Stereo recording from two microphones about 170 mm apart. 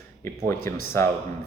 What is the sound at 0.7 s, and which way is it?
Speech, 15° left (ahead or behind).